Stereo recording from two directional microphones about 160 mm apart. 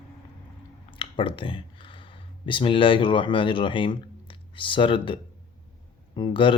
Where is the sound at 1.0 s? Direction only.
30° left (ahead or behind).